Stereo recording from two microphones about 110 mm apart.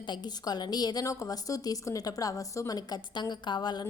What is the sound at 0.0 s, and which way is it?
A woman's voice, 40° left (ahead or behind).